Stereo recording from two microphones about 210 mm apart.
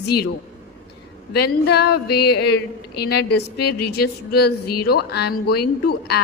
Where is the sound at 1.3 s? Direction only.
50° left (ahead or behind).